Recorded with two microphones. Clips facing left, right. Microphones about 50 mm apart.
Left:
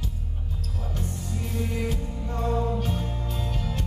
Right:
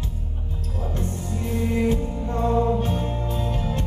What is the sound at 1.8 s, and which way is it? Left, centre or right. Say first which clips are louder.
Music: right 8 dB; right.